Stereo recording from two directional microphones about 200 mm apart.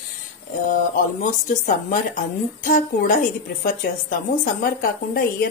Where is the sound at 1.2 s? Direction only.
40° left (ahead or behind).